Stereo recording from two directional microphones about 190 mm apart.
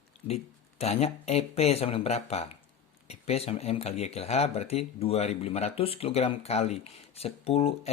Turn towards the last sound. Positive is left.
turn(degrees=30)  # may be behind; listen again after turning